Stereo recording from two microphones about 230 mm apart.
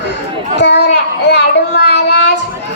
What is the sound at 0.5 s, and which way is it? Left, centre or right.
Child singing, left.